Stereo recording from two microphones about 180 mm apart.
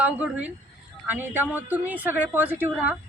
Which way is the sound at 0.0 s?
10° right (ahead or behind).